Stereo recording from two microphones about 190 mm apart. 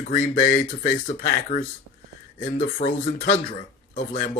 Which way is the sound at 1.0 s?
40° left (ahead or behind).